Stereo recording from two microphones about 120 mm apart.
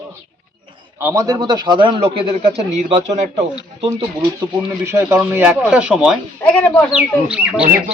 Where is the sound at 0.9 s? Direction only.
25° right (ahead or behind); by 2.0 s 40° right (ahead or behind).